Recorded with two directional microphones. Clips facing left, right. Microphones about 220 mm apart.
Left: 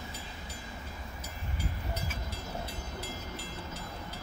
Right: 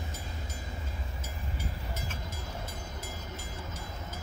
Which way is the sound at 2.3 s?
45° right (ahead or behind).